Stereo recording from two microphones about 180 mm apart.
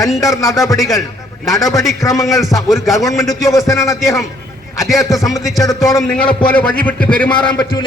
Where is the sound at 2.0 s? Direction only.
20° left (ahead or behind).